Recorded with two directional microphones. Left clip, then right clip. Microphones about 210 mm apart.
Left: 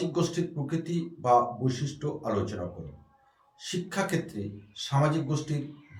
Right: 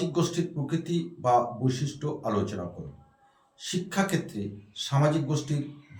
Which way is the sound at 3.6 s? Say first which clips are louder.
Right 2 dB; 5° right (ahead or behind).